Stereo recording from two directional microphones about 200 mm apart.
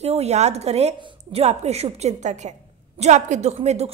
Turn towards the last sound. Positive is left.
turn(degrees=-35)  # may be behind; listen again after turning